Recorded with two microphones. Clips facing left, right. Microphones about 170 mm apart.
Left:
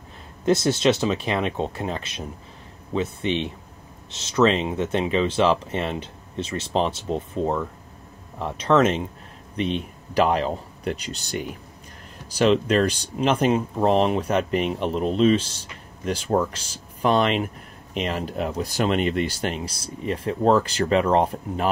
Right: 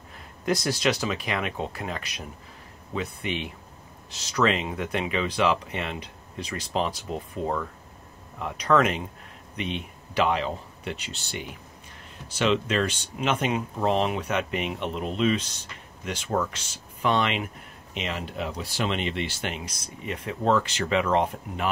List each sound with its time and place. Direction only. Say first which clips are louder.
0.5 s speech: left 6 dB; 25° left (ahead or behind)
9.6 s speech: left 6 dB; 35° left (ahead or behind)